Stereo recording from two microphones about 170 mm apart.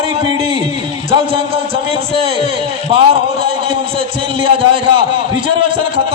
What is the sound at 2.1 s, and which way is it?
A man's voice, 35° right (ahead or behind).